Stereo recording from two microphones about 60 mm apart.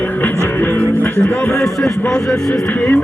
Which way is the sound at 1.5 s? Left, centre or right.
Centre.